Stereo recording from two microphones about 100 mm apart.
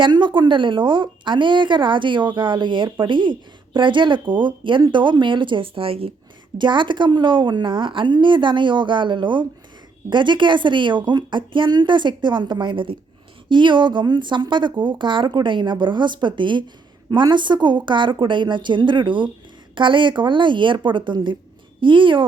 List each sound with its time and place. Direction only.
0.0 s speech: 50° right (ahead or behind); by 6.1 s 70° right (ahead or behind)
6.6 s speech: 55° right (ahead or behind)